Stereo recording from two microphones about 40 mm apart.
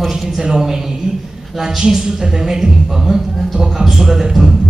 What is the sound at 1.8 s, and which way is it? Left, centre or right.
A man's voice, centre.